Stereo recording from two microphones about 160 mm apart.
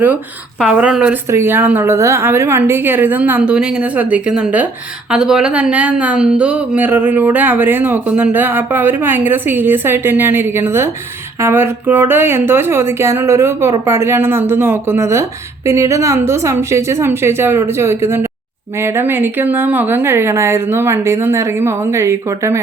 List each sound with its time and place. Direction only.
0.6 s speech: 5° right (ahead or behind)